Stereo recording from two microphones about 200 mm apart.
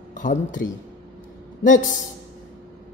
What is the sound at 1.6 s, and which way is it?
Speech, 40° left (ahead or behind).